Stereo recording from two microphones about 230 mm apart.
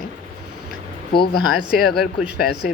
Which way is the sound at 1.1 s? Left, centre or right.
Left.